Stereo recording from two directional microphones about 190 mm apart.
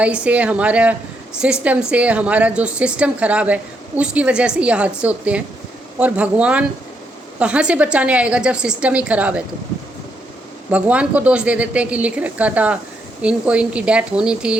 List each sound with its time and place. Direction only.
0.0 s a woman's voice: 5° right (ahead or behind)
10.7 s a woman's voice: 5° right (ahead or behind)